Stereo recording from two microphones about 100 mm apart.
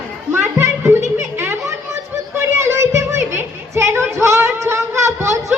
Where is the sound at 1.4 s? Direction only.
25° right (ahead or behind).